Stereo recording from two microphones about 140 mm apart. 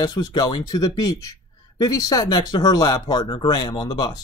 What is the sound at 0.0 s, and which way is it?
Speech, 30° left (ahead or behind).